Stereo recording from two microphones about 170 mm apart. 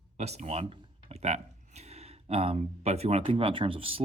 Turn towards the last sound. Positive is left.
turn(degrees=-30)  # may be behind; listen again after turning